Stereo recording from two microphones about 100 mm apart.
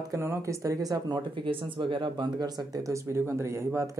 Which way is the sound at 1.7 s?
55° right (ahead or behind).